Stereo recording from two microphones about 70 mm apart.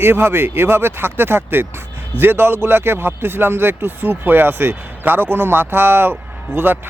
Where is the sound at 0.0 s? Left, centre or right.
Right.